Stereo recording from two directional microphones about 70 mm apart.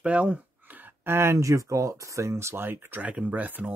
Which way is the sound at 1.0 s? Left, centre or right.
Right.